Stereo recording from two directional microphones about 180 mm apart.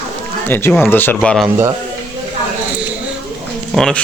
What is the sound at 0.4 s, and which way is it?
Speech, 10° left (ahead or behind).